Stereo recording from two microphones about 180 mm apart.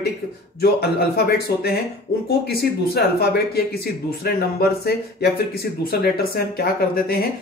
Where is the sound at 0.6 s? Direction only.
60° left (ahead or behind).